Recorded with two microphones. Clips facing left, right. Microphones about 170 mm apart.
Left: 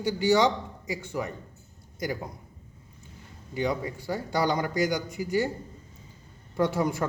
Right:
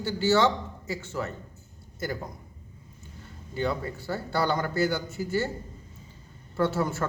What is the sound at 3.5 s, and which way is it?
Speech, 15° left (ahead or behind).